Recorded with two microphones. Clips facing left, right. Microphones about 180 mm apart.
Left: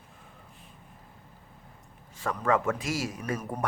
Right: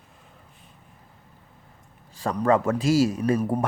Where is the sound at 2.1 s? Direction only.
35° right (ahead or behind).